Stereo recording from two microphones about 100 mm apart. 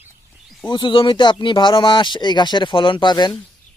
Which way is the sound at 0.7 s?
55° left (ahead or behind).